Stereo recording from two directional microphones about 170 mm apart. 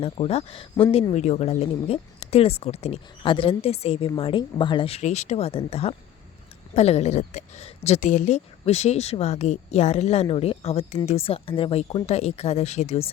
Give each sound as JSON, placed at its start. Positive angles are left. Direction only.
{"t": 0.0, "sound": "speech", "side_deg": 35}